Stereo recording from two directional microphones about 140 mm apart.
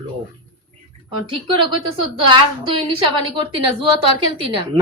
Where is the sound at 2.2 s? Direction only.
35° right (ahead or behind).